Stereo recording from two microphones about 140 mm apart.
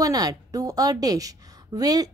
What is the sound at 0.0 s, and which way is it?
A woman's voice, 25° right (ahead or behind).